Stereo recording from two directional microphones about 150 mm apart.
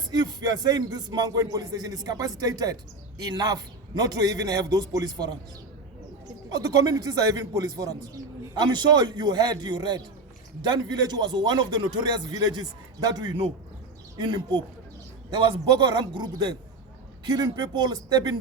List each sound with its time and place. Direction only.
0.1 s speech: 25° right (ahead or behind)
6.5 s speech: 25° right (ahead or behind)